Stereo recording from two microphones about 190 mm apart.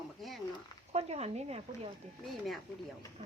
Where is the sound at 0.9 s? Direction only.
35° right (ahead or behind).